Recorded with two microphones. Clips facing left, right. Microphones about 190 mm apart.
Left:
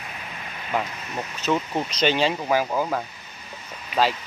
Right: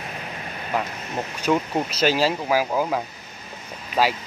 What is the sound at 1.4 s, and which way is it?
Speech, 10° right (ahead or behind).